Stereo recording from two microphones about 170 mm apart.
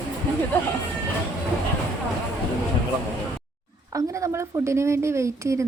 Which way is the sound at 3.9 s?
20° right (ahead or behind).